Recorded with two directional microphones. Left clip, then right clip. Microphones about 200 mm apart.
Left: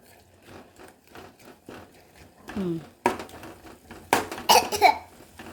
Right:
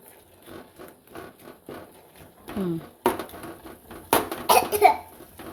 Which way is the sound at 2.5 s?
Centre (ahead or behind).